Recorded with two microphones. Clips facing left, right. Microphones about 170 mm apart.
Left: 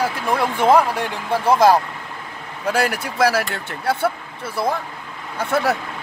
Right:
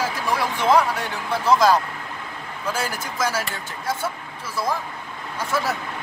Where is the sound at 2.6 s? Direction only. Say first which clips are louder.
Left 7 dB; 65° left (ahead or behind).